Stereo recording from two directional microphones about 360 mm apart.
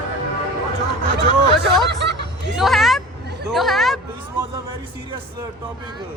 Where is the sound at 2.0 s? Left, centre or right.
Right.